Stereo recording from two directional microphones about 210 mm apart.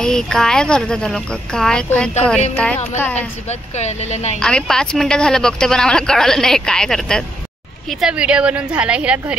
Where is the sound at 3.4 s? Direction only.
30° left (ahead or behind).